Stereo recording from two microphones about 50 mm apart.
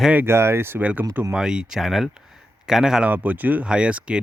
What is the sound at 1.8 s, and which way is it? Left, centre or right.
Speech, centre.